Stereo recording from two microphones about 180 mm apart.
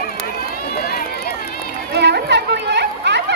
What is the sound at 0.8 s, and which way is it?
Run, 60° left (ahead or behind).